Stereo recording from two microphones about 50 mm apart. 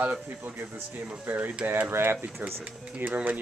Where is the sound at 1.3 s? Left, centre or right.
Right.